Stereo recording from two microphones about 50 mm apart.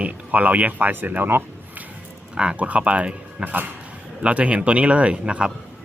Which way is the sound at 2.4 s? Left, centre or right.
Right.